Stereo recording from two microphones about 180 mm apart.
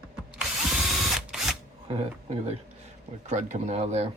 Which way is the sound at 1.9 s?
35° right (ahead or behind).